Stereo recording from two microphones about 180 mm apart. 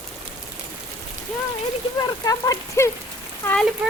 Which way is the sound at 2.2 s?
20° left (ahead or behind).